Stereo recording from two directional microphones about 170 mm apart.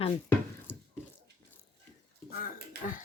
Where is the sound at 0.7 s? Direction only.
10° left (ahead or behind).